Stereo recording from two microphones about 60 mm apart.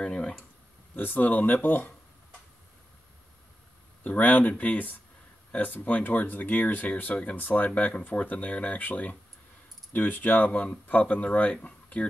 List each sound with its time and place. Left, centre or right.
0.0 s speech: centre
0.9 s speech: left
4.0 s speech: left